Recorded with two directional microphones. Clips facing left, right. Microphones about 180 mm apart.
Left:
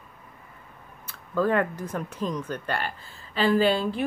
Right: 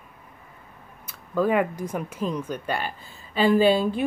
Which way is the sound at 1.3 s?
10° right (ahead or behind).